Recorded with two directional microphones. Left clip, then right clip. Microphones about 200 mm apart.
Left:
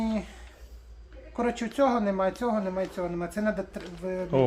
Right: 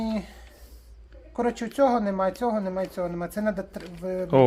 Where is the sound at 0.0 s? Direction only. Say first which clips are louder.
Right 1 dB; 40° right (ahead or behind).